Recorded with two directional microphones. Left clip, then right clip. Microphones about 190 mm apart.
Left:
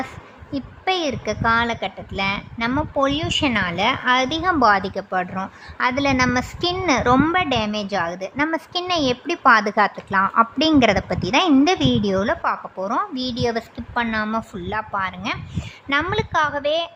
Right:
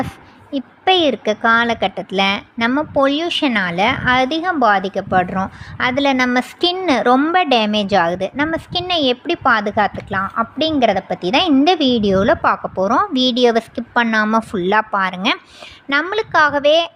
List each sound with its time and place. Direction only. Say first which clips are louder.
0.5 s a woman's voice: right 7 dB; 20° right (ahead or behind); by 11.2 s centre (ahead or behind)
11.2 s a woman's voice: right 2 dB; 15° right (ahead or behind); by 15.4 s 30° right (ahead or behind)
15.9 s a woman's voice: right 4 dB; 15° right (ahead or behind)